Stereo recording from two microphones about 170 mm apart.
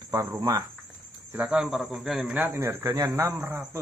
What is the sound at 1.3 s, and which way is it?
Speech, 5° right (ahead or behind).